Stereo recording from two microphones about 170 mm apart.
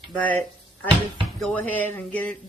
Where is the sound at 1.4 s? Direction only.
5° left (ahead or behind).